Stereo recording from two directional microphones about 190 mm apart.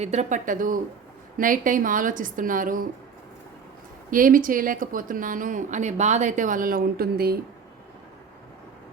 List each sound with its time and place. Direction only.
0.0 s a woman's voice: 35° right (ahead or behind)
4.1 s a woman's voice: 45° right (ahead or behind)